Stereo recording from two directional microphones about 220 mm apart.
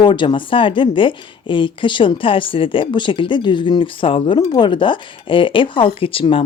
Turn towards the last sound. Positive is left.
turn(degrees=25)  # may be behind; listen again after turning